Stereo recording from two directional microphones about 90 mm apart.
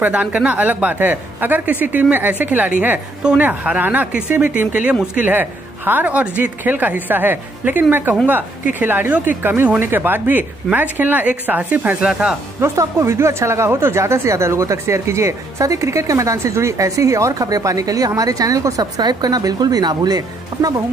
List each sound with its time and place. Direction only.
0.0 s speech: 15° right (ahead or behind)
12.5 s speech: 30° right (ahead or behind)